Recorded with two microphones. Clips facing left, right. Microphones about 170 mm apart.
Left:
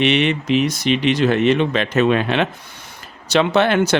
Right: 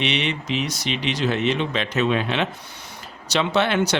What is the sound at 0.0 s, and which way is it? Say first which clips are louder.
Speech: left 8 dB; 50° left (ahead or behind).